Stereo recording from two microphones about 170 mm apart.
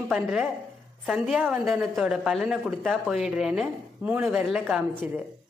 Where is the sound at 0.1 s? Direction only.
5° right (ahead or behind).